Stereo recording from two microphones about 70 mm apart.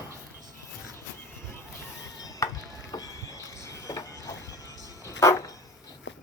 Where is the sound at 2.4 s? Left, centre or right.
Left.